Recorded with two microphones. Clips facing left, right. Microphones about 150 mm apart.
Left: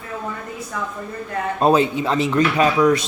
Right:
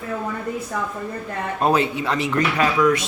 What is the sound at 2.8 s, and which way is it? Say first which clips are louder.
Speech: left 1 dB; 35° left (ahead or behind).